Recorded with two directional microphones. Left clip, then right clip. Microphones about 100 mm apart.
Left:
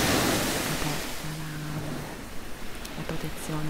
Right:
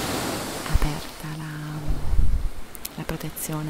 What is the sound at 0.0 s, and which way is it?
Waves, 30° left (ahead or behind).